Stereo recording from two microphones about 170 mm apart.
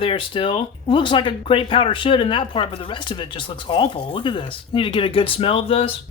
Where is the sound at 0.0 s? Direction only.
30° left (ahead or behind).